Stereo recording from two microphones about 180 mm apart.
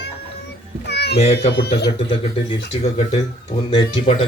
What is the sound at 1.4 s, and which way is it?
Speech, 60° left (ahead or behind).